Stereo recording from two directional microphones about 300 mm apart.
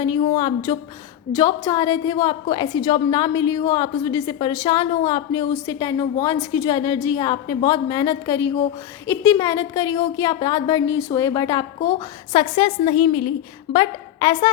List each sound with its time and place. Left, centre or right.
0.2 s a woman's voice: centre